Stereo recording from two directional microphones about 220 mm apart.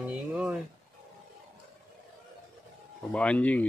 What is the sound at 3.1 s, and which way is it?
Speech, 5° left (ahead or behind).